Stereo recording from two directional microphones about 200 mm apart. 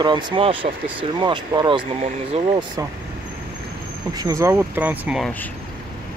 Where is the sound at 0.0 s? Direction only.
25° right (ahead or behind).